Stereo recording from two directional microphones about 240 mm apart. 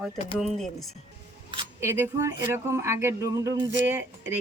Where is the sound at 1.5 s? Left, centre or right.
Centre.